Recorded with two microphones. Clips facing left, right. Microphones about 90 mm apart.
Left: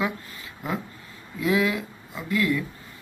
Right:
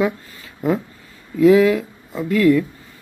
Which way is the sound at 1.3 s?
40° right (ahead or behind).